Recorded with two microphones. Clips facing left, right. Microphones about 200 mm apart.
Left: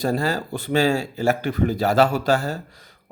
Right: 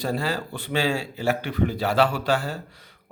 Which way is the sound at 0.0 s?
45° left (ahead or behind).